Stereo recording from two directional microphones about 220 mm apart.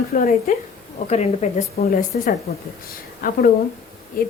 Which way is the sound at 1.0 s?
30° left (ahead or behind).